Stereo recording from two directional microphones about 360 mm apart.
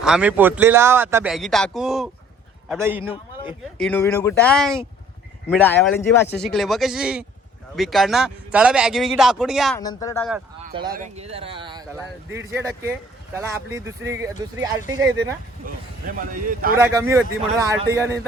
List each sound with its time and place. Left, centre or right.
0.0 s speech: centre
10.9 s speech: centre
15.6 s speech: right
16.7 s speech: centre